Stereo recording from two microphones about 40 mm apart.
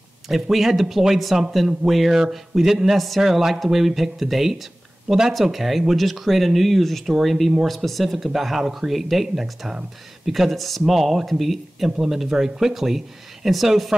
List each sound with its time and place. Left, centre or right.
0.3 s speech: centre
5.4 s speech: centre
12.0 s speech: centre